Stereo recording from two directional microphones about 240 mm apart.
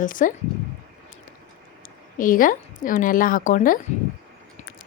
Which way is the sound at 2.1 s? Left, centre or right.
Left.